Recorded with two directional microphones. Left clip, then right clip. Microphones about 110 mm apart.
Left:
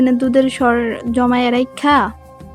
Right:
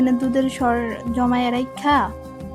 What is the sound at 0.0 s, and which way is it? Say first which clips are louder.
Speech: left 6 dB; 30° left (ahead or behind).